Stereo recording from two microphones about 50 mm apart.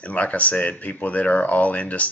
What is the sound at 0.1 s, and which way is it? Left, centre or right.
Speech, left.